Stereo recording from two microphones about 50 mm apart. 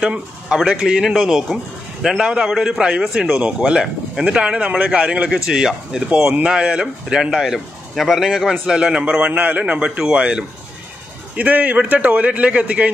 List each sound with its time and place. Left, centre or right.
0.0 s speech: centre
2.5 s speech: centre
3.2 s a man's voice: right
9.9 s speech: centre
11.3 s a man's voice: right